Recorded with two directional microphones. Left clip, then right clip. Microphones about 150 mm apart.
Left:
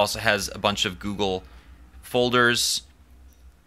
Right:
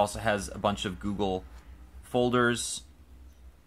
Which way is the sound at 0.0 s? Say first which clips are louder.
Left 6 dB; 10° left (ahead or behind).